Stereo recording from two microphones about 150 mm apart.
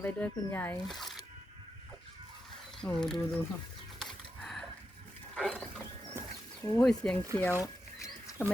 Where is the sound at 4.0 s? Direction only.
Centre (ahead or behind).